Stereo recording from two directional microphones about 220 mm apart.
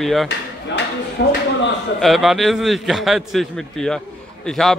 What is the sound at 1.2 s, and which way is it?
Speech, 50° left (ahead or behind).